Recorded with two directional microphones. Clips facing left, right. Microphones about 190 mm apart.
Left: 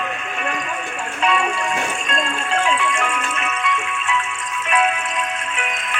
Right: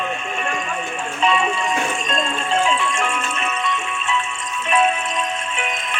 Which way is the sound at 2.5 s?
25° right (ahead or behind).